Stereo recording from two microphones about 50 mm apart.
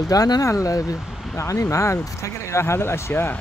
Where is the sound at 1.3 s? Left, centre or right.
Left.